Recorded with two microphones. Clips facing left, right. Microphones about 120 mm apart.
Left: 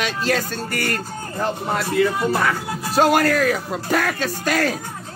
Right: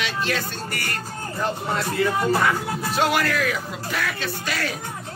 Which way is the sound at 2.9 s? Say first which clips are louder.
Left 6 dB; 40° left (ahead or behind).